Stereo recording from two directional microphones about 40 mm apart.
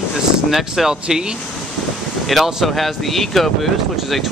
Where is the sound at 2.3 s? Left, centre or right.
Centre.